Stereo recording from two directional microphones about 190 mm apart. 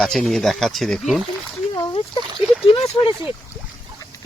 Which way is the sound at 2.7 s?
25° left (ahead or behind).